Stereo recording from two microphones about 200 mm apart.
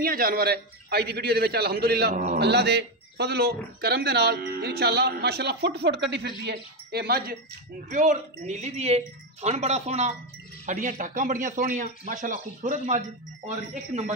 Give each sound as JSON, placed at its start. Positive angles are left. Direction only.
{"t": 0.0, "sound": "a man's voice", "side_deg": -45}
{"t": 7.9, "sound": "speech", "side_deg": -40}